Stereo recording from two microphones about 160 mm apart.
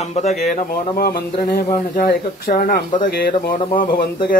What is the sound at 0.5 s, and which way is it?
Speech, 60° left (ahead or behind).